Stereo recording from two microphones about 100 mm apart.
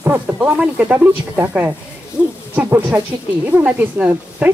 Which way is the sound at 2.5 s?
15° right (ahead or behind).